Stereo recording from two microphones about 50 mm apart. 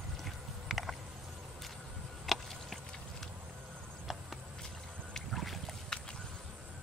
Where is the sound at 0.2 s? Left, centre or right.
Centre.